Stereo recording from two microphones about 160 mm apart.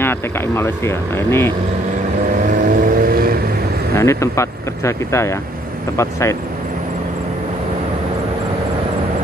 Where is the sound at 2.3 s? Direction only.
55° right (ahead or behind).